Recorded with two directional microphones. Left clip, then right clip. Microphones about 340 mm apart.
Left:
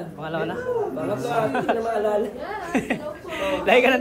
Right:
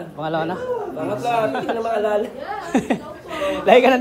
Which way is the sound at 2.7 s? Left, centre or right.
Centre.